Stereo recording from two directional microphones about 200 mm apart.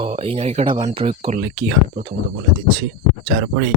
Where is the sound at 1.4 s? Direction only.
45° right (ahead or behind).